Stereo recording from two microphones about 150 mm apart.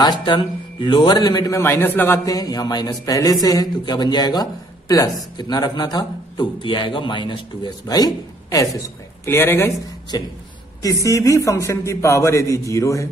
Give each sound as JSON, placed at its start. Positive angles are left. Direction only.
{"t": 0.0, "sound": "speech", "side_deg": 30}
{"t": 10.1, "sound": "speech", "side_deg": 25}